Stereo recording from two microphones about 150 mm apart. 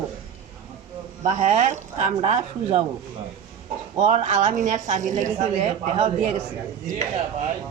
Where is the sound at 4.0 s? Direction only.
50° right (ahead or behind).